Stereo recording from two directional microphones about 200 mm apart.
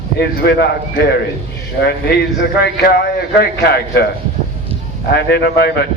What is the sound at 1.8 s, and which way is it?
A man's voice, 55° left (ahead or behind).